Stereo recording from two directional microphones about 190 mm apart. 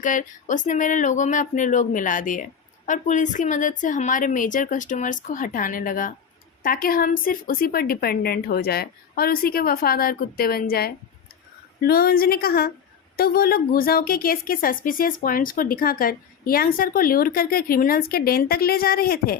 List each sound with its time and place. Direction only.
0.0 s speech: 45° left (ahead or behind)